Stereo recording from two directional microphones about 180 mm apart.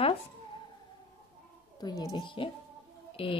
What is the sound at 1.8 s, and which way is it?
Speech, 20° left (ahead or behind).